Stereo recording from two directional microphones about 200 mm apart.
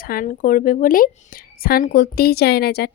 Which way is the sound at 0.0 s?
45° left (ahead or behind).